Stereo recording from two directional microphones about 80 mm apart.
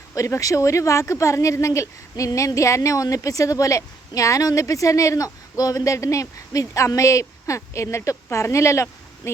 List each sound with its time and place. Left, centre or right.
0.1 s speech: left